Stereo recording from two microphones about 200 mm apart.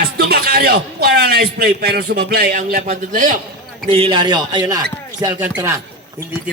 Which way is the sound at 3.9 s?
30° right (ahead or behind).